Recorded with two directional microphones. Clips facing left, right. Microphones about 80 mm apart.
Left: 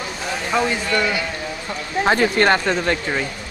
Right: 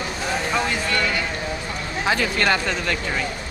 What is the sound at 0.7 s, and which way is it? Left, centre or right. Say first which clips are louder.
Speech: left 3 dB; centre.